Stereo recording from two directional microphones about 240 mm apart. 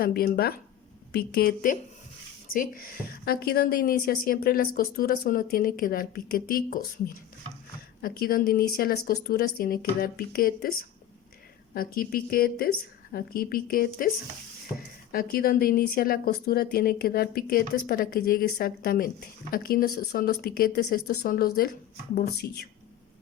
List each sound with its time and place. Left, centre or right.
0.0 s a woman's voice: left
15.1 s a woman's voice: left